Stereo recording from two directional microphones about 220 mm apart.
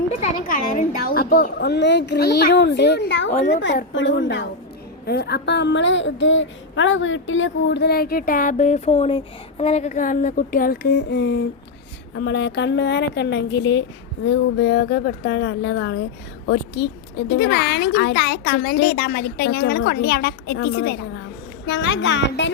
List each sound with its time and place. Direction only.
0.2 s a child's voice: 35° left (ahead or behind); by 22.4 s 55° left (ahead or behind)